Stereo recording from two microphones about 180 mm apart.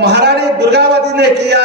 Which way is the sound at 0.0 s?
65° right (ahead or behind).